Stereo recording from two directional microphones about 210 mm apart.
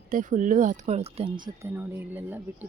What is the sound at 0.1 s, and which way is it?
Speech, 40° right (ahead or behind).